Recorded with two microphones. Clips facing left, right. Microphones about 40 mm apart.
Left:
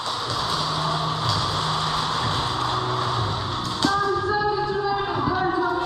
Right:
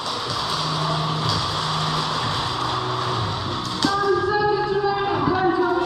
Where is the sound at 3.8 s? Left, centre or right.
Right.